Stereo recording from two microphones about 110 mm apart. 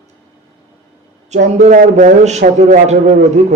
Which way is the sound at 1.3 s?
90° right.